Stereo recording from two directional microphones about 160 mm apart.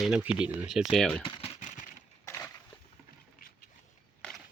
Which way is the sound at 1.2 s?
30° left (ahead or behind).